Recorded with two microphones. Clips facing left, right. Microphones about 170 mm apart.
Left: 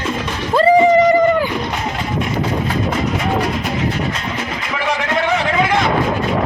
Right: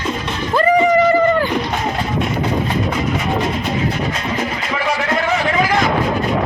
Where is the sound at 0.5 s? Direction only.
25° left (ahead or behind).